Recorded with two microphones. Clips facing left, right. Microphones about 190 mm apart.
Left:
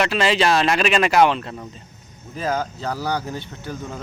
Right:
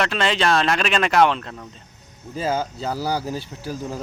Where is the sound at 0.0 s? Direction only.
5° left (ahead or behind).